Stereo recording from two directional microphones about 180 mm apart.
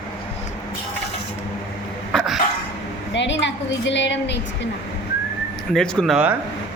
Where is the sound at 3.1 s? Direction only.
85° left.